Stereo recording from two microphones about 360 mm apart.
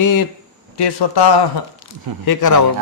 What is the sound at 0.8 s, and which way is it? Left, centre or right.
Speech, left.